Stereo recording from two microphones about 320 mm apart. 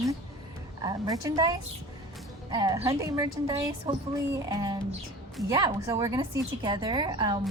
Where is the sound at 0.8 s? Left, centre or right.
Centre.